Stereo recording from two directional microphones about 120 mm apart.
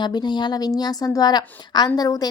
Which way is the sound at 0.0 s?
40° left (ahead or behind).